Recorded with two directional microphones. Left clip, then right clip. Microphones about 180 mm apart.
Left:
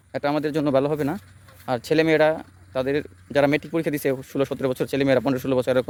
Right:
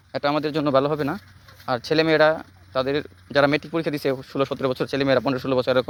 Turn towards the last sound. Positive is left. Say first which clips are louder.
# right 1 dB
turn(degrees=20)  # may be behind; listen again after turning